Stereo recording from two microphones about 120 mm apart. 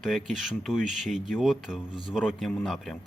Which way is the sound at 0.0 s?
Centre (ahead or behind).